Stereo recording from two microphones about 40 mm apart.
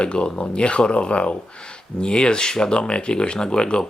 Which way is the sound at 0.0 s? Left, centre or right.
Left.